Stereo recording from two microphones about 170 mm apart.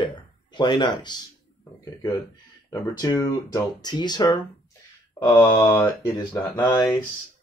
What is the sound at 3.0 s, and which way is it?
Speech, 20° left (ahead or behind).